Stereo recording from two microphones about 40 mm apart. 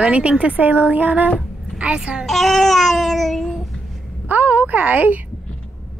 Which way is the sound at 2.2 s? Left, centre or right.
Centre.